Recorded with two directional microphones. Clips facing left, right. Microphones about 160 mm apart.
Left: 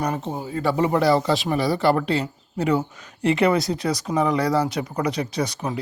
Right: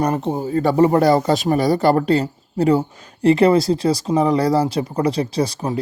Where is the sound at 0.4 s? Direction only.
45° right (ahead or behind).